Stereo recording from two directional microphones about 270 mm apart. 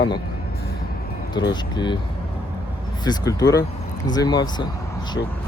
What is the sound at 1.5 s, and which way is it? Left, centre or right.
Speech, centre.